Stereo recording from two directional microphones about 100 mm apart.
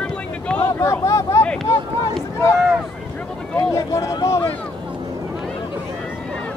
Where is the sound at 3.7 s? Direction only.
30° left (ahead or behind).